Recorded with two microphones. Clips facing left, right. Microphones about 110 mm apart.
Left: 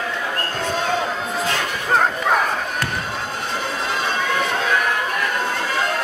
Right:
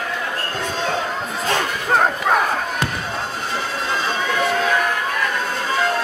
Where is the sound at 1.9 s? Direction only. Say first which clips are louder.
Even; 5° right (ahead or behind).